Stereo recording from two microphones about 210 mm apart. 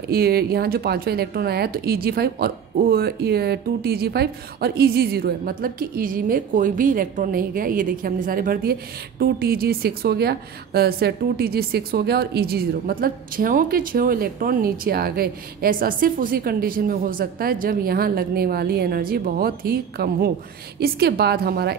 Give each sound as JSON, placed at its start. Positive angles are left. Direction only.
{"t": 0.1, "sound": "a woman's voice", "side_deg": -45}